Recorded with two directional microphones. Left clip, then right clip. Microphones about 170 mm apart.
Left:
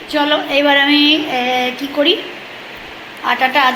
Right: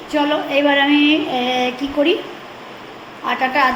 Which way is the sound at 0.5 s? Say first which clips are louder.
Left 2 dB; 5° right (ahead or behind).